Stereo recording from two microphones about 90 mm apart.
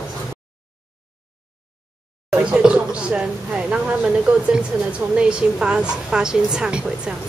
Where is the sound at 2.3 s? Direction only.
10° right (ahead or behind).